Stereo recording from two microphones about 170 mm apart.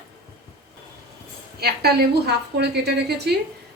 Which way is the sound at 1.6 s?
70° right (ahead or behind).